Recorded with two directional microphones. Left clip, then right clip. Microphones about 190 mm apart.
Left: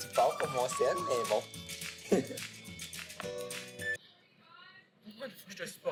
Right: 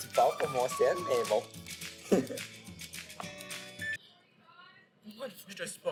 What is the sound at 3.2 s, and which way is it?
Music, centre (ahead or behind).